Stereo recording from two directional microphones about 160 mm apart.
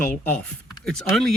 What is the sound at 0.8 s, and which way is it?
Speech, 5° left (ahead or behind).